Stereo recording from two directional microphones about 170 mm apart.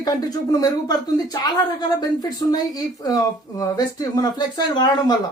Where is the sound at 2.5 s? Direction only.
20° left (ahead or behind).